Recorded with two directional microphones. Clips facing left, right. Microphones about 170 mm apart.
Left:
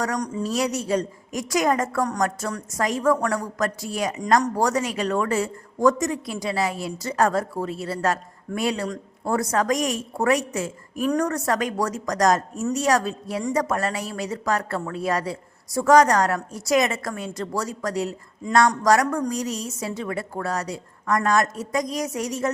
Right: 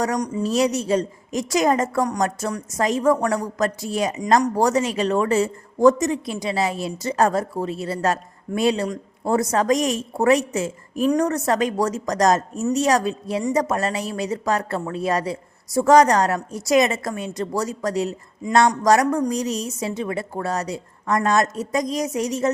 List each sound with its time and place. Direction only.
0.0 s speech: 15° right (ahead or behind)